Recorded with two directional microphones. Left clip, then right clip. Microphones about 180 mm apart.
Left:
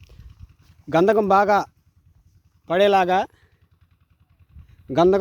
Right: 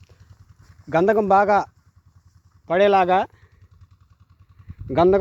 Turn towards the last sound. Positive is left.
turn(degrees=25)  # may be behind; listen again after turning